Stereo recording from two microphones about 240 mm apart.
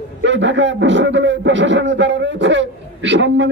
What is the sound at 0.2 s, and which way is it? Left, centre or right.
A man's voice, right.